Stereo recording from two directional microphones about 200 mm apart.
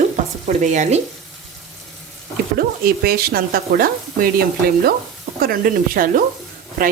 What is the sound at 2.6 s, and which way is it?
Speech, 50° right (ahead or behind).